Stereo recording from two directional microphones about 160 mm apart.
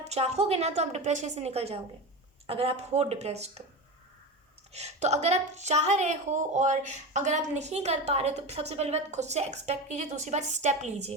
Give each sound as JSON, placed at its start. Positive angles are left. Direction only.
{"t": 0.0, "sound": "a woman's voice", "side_deg": -40}
{"t": 4.7, "sound": "a woman's voice", "side_deg": -45}